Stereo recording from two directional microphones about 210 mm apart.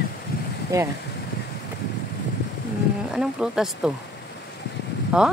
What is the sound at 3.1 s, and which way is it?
Speech, 5° right (ahead or behind).